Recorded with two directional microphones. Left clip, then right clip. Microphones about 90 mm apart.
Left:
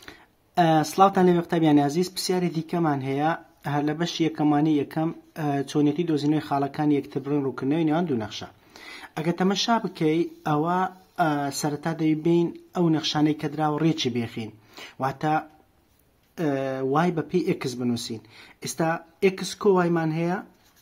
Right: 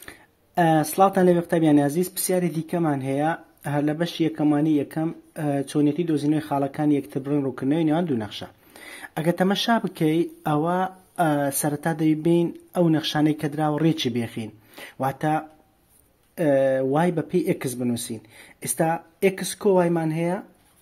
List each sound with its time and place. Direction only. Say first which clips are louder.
0.0 s speech: right 2 dB; 25° right (ahead or behind)
19.6 s speech: right 1 dB; 15° right (ahead or behind)